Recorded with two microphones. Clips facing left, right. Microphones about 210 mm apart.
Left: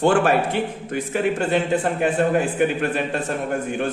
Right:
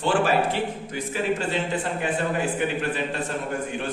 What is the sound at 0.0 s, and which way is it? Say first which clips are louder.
A man's voice: left 4 dB; 50° left (ahead or behind).